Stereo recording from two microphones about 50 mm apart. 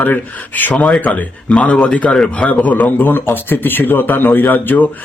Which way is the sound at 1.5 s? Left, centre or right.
Left.